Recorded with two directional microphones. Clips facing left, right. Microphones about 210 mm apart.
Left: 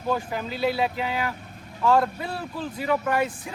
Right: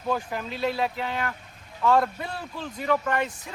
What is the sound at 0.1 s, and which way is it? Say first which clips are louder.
A man's voice: left 1 dB; centre (ahead or behind).